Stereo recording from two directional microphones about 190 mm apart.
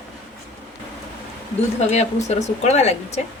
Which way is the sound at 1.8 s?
35° left (ahead or behind).